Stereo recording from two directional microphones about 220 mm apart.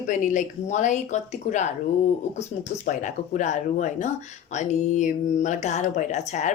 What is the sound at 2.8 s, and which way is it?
Speech, 35° left (ahead or behind).